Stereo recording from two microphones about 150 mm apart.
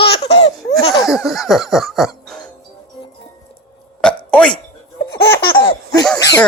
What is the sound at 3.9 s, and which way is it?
Hiccup, 5° left (ahead or behind).